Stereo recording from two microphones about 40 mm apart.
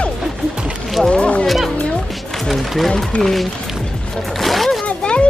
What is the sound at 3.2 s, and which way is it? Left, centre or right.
Speech, centre.